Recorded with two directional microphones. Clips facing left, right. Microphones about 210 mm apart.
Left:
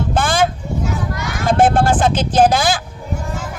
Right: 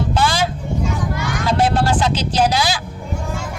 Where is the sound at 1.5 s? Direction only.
50° left (ahead or behind).